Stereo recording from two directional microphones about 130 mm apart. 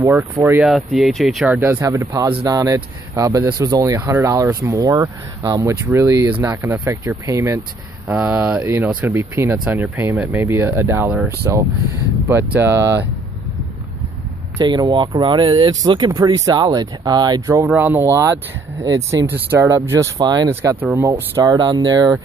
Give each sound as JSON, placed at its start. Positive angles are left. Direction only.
{"t": 0.0, "sound": "speech", "side_deg": -20}
{"t": 0.6, "sound": "speech", "side_deg": 0}
{"t": 1.5, "sound": "speech", "side_deg": -20}
{"t": 14.6, "sound": "speech", "side_deg": -35}
{"t": 17.6, "sound": "speech", "side_deg": -15}
{"t": 20.2, "sound": "speech", "side_deg": -30}
{"t": 20.8, "sound": "speech", "side_deg": -15}
{"t": 21.5, "sound": "speech", "side_deg": -35}